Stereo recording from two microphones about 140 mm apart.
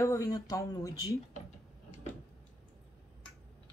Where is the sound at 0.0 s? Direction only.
25° left (ahead or behind).